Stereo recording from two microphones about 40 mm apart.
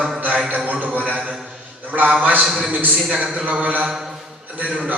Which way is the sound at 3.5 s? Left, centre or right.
Right.